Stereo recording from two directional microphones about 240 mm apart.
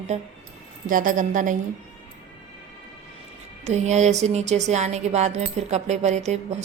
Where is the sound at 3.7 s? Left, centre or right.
Right.